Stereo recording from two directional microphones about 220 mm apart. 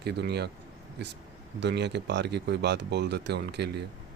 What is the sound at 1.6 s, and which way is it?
Speech, 50° right (ahead or behind).